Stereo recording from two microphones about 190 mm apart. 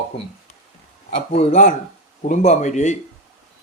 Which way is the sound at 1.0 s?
35° left (ahead or behind).